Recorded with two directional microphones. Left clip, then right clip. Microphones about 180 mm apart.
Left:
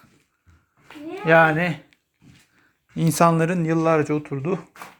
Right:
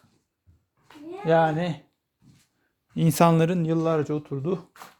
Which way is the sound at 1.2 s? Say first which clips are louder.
Left 5 dB; 35° right (ahead or behind).